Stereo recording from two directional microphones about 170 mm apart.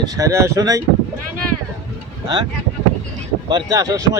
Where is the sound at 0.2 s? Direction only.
15° right (ahead or behind).